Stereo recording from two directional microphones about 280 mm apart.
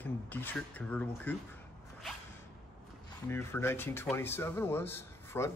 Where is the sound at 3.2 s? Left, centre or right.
Centre.